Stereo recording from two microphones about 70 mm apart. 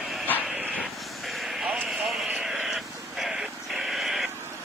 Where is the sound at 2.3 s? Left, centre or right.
Centre.